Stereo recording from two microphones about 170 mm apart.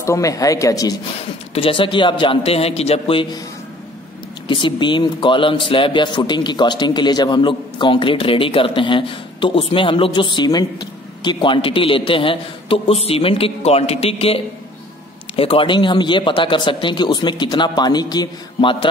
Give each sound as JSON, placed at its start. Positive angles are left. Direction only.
{"t": 0.0, "sound": "a man's voice", "side_deg": 20}
{"t": 1.5, "sound": "speech", "side_deg": 30}
{"t": 4.5, "sound": "a man's voice", "side_deg": 30}